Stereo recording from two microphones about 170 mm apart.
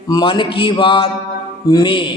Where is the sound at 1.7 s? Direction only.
25° left (ahead or behind).